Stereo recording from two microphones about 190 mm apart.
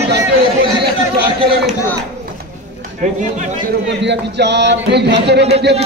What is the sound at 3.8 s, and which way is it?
Speech, 65° right (ahead or behind).